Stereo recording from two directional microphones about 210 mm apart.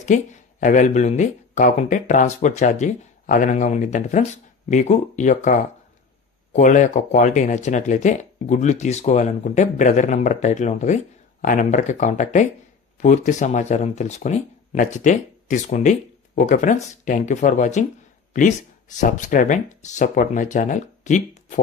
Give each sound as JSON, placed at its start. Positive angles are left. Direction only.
{"t": 0.0, "sound": "speech", "side_deg": 35}
{"t": 19.0, "sound": "speech", "side_deg": 40}